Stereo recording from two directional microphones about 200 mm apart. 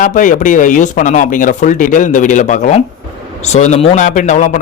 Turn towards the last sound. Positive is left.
turn(degrees=40)  # may be behind; listen again after turning